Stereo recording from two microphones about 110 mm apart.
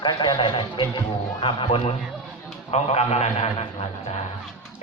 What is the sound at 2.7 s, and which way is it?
Speech, 85° left.